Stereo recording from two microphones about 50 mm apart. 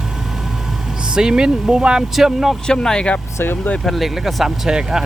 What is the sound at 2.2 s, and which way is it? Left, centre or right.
Speech, centre.